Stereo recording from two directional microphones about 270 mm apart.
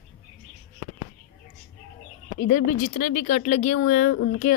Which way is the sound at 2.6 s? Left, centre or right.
Left.